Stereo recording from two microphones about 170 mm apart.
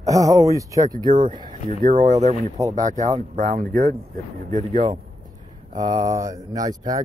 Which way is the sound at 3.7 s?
50° right (ahead or behind).